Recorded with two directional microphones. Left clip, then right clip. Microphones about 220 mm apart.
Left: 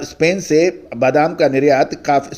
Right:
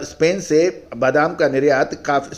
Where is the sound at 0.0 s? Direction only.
25° left (ahead or behind).